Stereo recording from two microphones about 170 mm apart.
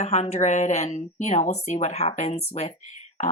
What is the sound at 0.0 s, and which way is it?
Speech, 40° left (ahead or behind).